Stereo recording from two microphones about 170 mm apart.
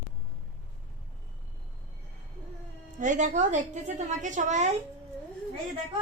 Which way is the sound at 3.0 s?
45° right (ahead or behind).